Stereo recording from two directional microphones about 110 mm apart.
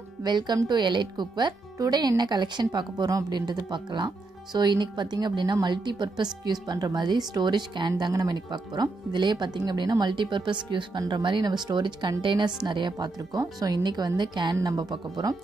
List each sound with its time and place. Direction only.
0.2 s speech: 40° right (ahead or behind)